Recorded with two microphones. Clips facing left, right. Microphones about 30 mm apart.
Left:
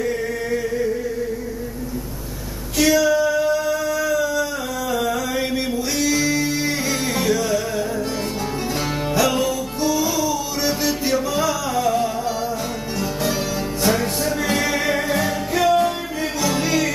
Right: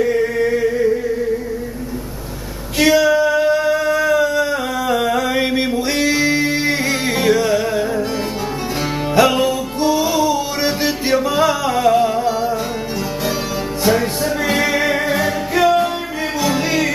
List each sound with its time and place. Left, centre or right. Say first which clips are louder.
0.0 s a sound: right 7 dB; centre
2.8 s male singing: right 3 dB; right
5.9 s music: right 3 dB; right
9.1 s music: right 6 dB; right
13.8 s music: right 4 dB; centre